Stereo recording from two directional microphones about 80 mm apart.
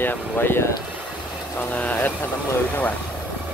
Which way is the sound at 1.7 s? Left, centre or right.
Centre.